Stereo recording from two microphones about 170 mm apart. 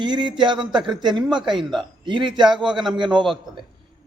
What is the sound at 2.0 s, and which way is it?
Speech, 30° right (ahead or behind).